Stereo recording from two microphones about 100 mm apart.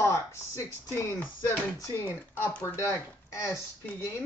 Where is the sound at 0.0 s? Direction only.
30° left (ahead or behind).